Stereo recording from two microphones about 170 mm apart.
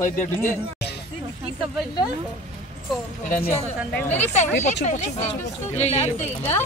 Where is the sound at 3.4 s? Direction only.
35° left (ahead or behind).